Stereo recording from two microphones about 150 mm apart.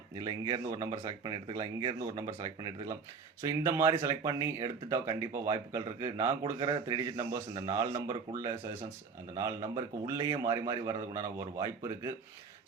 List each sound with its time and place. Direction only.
0.2 s speech: 25° right (ahead or behind)
3.4 s speech: 20° right (ahead or behind)
9.3 s speech: 20° right (ahead or behind)